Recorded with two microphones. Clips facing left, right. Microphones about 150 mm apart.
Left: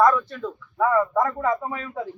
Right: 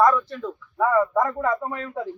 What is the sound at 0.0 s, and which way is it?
A man's voice, 5° right (ahead or behind).